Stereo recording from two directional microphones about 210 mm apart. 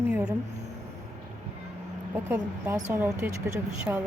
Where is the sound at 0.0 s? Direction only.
10° right (ahead or behind).